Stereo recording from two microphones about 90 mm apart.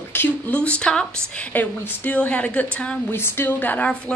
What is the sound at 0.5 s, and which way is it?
Speech, 15° left (ahead or behind).